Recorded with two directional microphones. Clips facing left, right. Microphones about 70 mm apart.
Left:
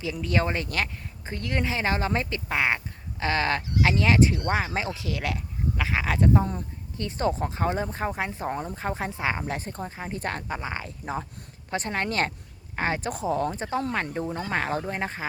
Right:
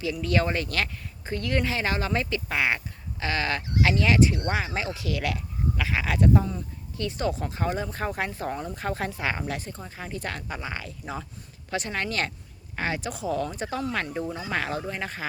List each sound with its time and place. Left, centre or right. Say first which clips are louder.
0.0 s speech: right 1 dB; left
7.9 s speech: even; centre
9.5 s speech: left 2 dB; left